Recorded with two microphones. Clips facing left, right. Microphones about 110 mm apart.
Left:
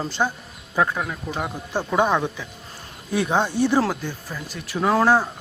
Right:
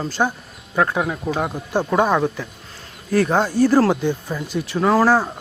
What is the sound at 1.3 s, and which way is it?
Speech, 30° right (ahead or behind).